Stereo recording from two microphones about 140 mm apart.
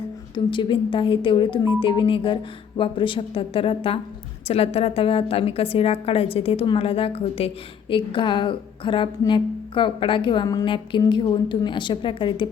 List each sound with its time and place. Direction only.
0.3 s a woman's voice: 35° left (ahead or behind)